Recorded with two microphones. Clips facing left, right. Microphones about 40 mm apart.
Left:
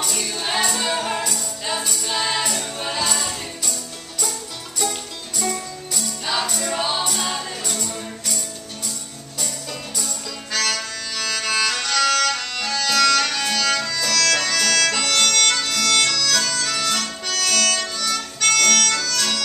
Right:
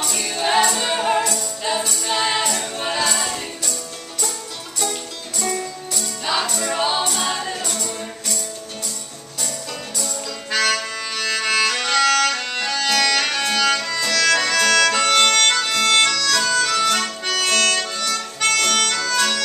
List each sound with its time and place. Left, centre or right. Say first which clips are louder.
0.0 s music: right 3 dB; centre
5.4 s music: right 2 dB; centre
10.5 s music: right 4 dB; centre
16.2 s harmonica: right 3 dB; centre
18.0 s music: right 1 dB; centre